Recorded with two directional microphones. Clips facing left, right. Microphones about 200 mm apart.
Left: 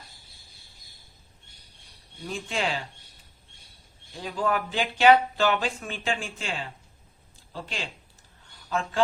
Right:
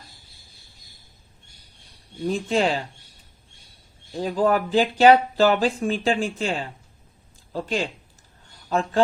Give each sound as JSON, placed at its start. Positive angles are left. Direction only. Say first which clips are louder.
{"t": 2.2, "sound": "speech", "louder": "right 8 dB", "side_deg": -35}
{"t": 4.1, "sound": "speech", "louder": "right 7 dB", "side_deg": -40}